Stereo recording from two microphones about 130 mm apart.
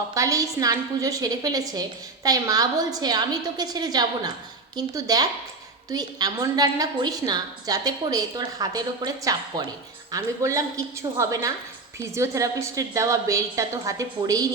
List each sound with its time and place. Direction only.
0.1 s a woman's voice: 25° right (ahead or behind)